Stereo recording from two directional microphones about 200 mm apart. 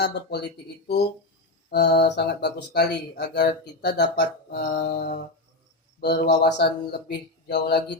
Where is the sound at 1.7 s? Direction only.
55° left (ahead or behind).